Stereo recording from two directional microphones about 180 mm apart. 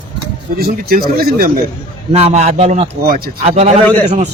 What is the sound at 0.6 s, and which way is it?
Speech, 55° right (ahead or behind).